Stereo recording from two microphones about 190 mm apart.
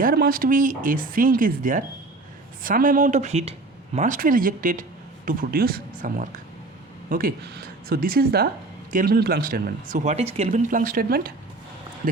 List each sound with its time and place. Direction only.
0.0 s speech: 50° right (ahead or behind)